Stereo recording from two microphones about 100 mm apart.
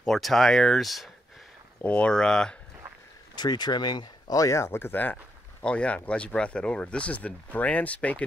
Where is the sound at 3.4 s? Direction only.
45° left (ahead or behind); by 8.2 s 15° left (ahead or behind).